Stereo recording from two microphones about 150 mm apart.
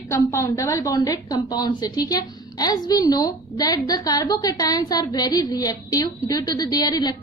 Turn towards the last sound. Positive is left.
turn(degrees=25)  # may be behind; listen again after turning